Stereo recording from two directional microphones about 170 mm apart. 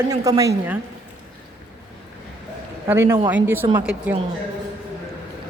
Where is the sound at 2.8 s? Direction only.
15° right (ahead or behind).